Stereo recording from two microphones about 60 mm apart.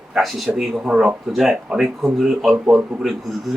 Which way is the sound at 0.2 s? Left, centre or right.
Centre.